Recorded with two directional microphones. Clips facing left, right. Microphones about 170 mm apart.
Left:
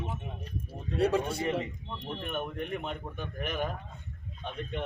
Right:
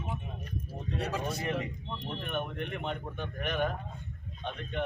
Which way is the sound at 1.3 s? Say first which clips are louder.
Left 2 dB; 30° left (ahead or behind).